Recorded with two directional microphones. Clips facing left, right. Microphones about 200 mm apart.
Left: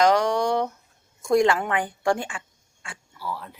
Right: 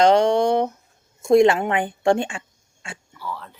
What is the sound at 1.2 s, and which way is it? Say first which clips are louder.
Speech: right 5 dB; 25° right (ahead or behind).